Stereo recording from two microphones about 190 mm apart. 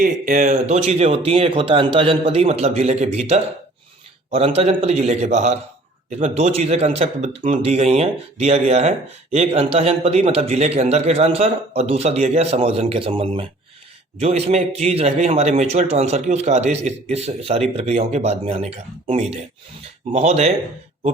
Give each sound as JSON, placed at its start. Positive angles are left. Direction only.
{"t": 0.0, "sound": "speech", "side_deg": -45}